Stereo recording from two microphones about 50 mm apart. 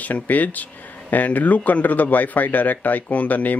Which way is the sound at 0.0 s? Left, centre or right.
Left.